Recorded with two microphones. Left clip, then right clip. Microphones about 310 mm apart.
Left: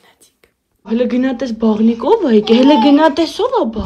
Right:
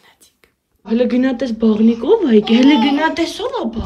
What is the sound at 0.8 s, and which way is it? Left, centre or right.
Speech, centre.